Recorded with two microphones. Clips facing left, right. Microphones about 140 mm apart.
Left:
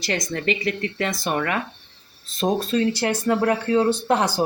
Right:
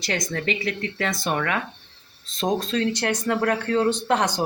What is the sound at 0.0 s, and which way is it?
Speech, centre (ahead or behind).